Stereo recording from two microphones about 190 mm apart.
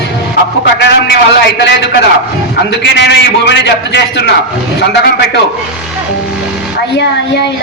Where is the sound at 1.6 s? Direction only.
70° left (ahead or behind).